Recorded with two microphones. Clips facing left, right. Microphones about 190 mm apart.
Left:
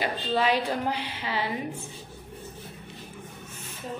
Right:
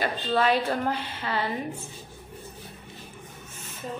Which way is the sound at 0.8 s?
50° right (ahead or behind).